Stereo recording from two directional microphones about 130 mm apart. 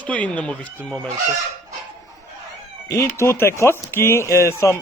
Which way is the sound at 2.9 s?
20° left (ahead or behind).